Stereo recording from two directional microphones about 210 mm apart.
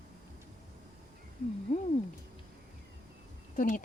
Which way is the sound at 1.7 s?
35° left (ahead or behind).